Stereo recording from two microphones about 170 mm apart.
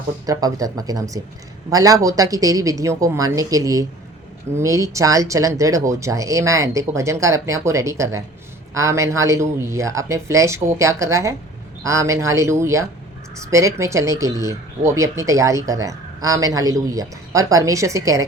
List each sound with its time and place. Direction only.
0.3 s speech: 20° right (ahead or behind)